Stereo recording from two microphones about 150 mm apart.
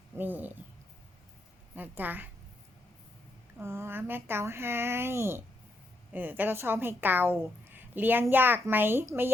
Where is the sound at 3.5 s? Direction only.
15° right (ahead or behind).